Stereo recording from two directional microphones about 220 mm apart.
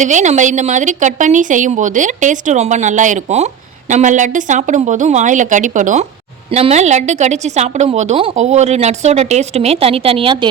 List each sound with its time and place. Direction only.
0.0 s speech: 35° right (ahead or behind)